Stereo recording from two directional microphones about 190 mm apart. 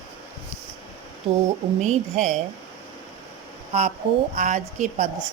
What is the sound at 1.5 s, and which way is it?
Speech, 35° right (ahead or behind).